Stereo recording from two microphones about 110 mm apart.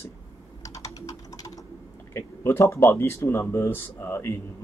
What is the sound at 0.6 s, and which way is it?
Typing, 30° left (ahead or behind).